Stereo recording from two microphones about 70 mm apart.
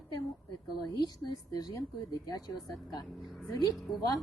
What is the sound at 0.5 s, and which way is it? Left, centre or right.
Speech, left.